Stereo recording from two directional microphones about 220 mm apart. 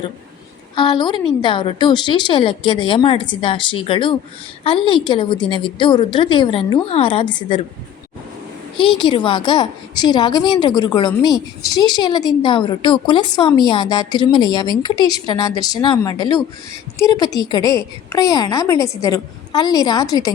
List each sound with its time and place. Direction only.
0.8 s a woman's voice: 20° left (ahead or behind)
9.0 s a woman's voice: 20° left (ahead or behind)